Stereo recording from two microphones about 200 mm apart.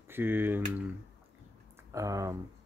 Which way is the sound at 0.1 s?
10° right (ahead or behind).